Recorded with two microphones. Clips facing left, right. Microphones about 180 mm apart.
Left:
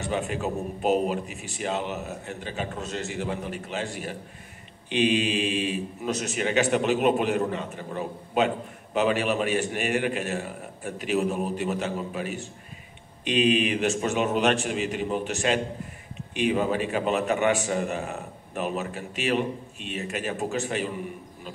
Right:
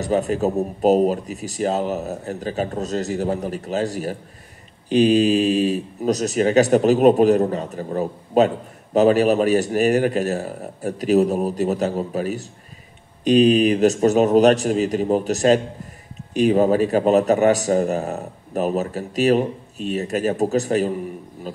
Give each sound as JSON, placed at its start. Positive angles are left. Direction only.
{"t": 0.0, "sound": "a man's voice", "side_deg": -40}